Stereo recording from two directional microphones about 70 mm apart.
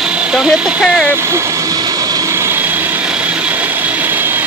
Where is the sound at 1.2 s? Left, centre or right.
Right.